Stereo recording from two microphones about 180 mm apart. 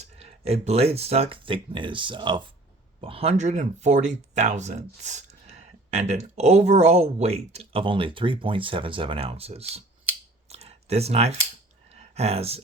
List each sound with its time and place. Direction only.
0.0 s speech: 35° right (ahead or behind)
10.5 s computer keyboard: 35° right (ahead or behind)
11.9 s a sound: 35° right (ahead or behind)